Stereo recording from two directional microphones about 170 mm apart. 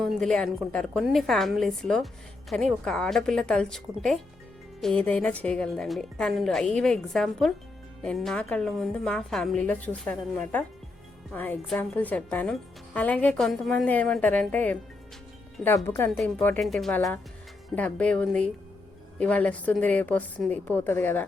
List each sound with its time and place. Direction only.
0.0 s a woman's voice: centre (ahead or behind)